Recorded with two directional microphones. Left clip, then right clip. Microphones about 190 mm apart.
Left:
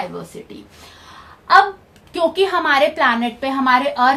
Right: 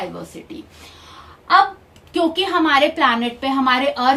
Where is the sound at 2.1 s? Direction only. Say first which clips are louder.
Left 1 dB; 35° left (ahead or behind).